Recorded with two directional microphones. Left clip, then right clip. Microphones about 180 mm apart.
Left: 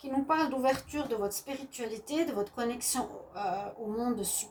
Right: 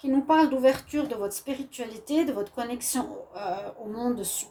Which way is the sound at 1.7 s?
55° right (ahead or behind).